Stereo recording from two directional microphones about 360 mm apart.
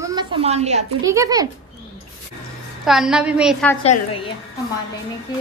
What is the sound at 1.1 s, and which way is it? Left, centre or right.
Speech, centre.